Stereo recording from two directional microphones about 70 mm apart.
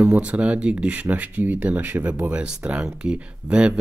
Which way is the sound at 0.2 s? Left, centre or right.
Centre.